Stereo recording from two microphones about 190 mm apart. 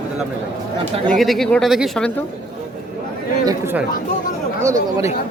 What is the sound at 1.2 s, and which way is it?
Speech, centre (ahead or behind).